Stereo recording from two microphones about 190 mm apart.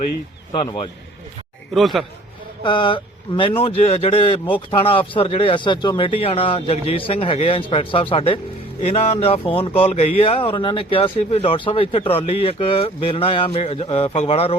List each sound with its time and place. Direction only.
1.7 s speech: centre (ahead or behind)
2.6 s speech: 25° left (ahead or behind)